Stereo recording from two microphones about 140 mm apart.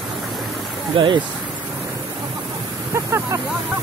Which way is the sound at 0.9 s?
40° right (ahead or behind).